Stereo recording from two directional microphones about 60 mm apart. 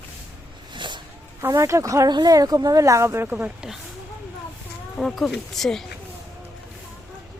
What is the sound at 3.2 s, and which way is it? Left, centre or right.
Speech, right.